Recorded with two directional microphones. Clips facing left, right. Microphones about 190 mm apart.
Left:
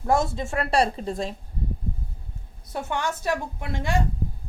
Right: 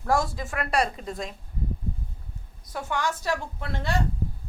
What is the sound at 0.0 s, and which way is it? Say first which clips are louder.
A woman's voice: left 2 dB; 25° left (ahead or behind).